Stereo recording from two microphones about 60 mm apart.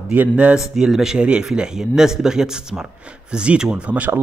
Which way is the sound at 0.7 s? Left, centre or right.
Centre.